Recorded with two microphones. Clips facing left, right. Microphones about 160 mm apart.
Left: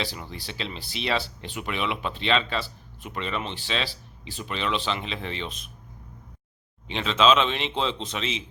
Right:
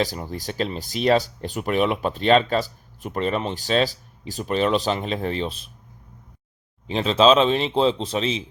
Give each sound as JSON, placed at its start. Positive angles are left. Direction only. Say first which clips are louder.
{"t": 0.0, "sound": "speech", "louder": "right 8 dB", "side_deg": -45}
{"t": 6.8, "sound": "speech", "louder": "right 5 dB", "side_deg": -35}